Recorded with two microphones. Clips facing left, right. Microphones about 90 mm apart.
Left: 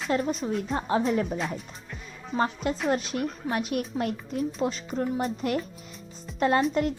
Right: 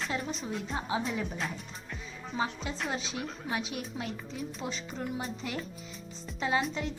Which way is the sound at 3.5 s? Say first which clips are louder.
Left 6 dB; 50° left (ahead or behind).